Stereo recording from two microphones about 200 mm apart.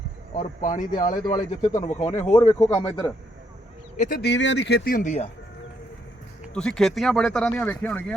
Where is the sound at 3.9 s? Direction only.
40° left (ahead or behind).